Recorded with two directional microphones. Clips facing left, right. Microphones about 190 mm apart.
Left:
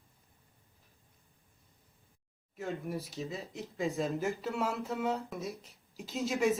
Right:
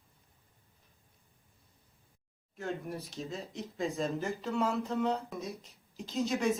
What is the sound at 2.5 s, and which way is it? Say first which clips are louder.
Speech: left 1 dB; centre (ahead or behind).